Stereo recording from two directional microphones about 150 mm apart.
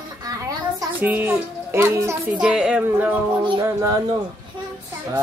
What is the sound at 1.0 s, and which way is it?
A child's voice, 10° right (ahead or behind).